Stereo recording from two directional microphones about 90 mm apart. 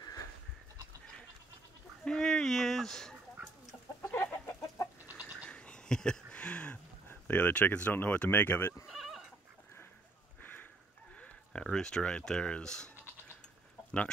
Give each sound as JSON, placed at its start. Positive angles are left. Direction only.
{"t": 0.0, "sound": "goat", "side_deg": 40}
{"t": 2.0, "sound": "speech", "side_deg": 5}
{"t": 4.2, "sound": "chicken", "side_deg": 35}
{"t": 5.0, "sound": "bird", "side_deg": -15}
{"t": 5.4, "sound": "a sound", "side_deg": 10}
{"t": 7.1, "sound": "speech", "side_deg": 20}
{"t": 8.9, "sound": "goat", "side_deg": 0}
{"t": 10.4, "sound": "a sound", "side_deg": 20}
{"t": 11.1, "sound": "speech", "side_deg": 10}